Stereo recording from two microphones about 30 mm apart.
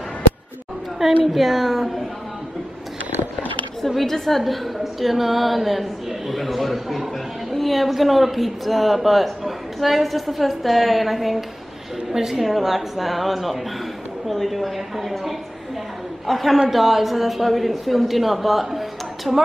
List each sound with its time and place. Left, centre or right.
1.2 s speech: centre
3.8 s speech: centre
12.1 s a woman's voice: centre
12.4 s a woman's voice: centre